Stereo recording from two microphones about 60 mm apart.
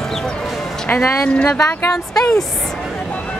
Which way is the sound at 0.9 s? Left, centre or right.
Left.